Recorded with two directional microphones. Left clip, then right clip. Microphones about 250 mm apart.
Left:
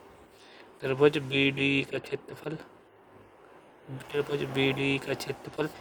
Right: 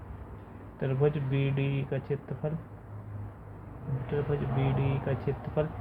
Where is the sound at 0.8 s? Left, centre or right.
Left.